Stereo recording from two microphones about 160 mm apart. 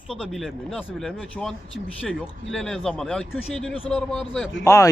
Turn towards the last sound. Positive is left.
turn(degrees=15)  # may be behind; listen again after turning